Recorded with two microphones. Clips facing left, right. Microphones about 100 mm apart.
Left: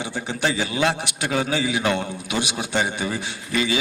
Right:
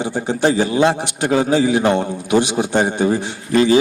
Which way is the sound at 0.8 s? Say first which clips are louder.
Right 6 dB; 25° right (ahead or behind).